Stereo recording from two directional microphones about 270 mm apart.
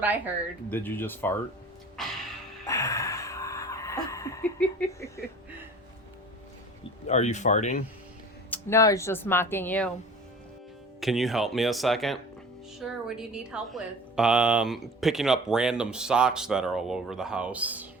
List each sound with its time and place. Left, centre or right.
0.7 s speech: centre
2.0 s music: centre
2.6 s a sound: centre
7.1 s speech: left
8.4 s speech: centre
11.0 s a woman's voice: centre